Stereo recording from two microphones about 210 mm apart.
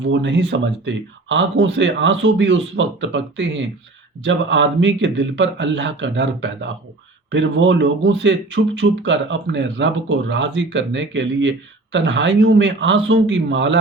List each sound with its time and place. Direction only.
0.0 s speech: 60° right (ahead or behind)